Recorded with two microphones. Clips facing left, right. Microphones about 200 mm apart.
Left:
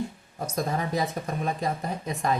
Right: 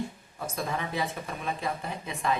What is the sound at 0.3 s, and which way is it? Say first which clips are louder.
Speech: left 4 dB; 40° left (ahead or behind).